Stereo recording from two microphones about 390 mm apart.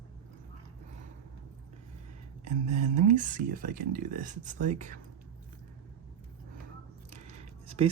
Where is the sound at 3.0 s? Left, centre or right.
Centre.